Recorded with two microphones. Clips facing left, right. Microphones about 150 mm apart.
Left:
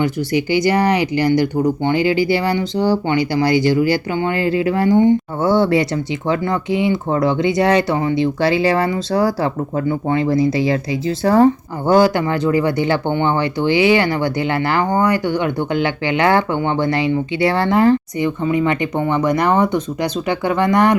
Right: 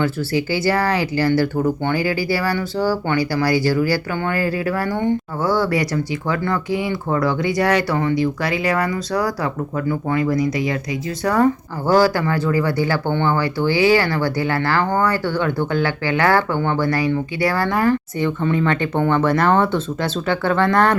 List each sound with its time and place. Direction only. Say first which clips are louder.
0.0 s speech: left 2 dB; 20° left (ahead or behind)